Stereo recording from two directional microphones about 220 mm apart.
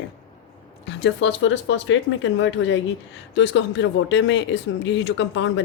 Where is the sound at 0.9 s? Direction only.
55° left (ahead or behind).